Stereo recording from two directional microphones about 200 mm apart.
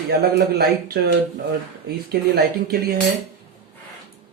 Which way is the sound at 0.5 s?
55° right (ahead or behind).